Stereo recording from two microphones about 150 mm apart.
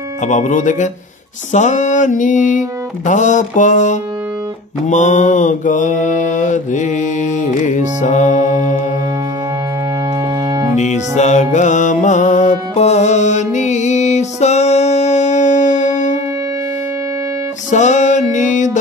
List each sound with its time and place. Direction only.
0.2 s mantra: 55° left (ahead or behind)
10.8 s music: 50° left (ahead or behind)
17.6 s music: 50° left (ahead or behind)